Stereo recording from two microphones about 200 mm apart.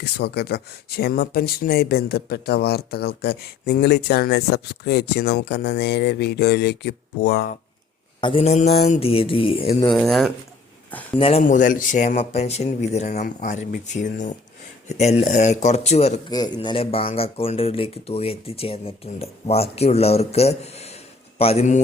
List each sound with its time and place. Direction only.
0.0 s speech: 55° left (ahead or behind)
8.2 s speech: 25° left (ahead or behind)
9.9 s speech: centre (ahead or behind)
11.2 s speech: 30° left (ahead or behind)
11.4 s speech: 40° left (ahead or behind)
16.3 s speech: 20° left (ahead or behind)